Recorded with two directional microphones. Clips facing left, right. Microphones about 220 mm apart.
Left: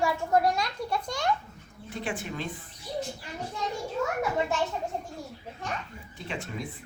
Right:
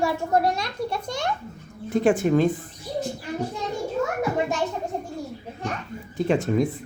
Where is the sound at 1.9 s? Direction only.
45° right (ahead or behind).